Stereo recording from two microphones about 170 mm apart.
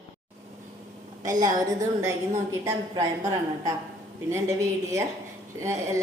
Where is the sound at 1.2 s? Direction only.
20° right (ahead or behind).